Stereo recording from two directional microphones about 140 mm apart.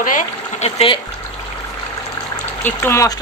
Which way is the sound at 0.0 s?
65° left (ahead or behind).